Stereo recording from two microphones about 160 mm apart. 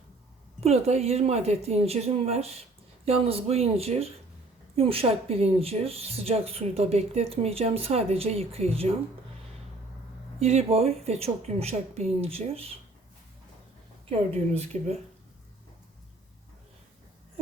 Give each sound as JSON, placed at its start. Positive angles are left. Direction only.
{"t": 0.6, "sound": "speech", "side_deg": -40}
{"t": 10.4, "sound": "speech", "side_deg": -40}
{"t": 14.1, "sound": "speech", "side_deg": -40}